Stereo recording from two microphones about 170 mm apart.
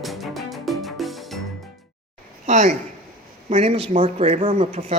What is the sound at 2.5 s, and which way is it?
Speech, 40° right (ahead or behind).